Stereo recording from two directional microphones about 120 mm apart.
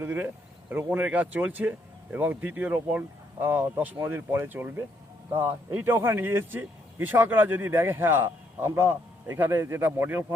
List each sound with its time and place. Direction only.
0.0 s speech: 15° right (ahead or behind)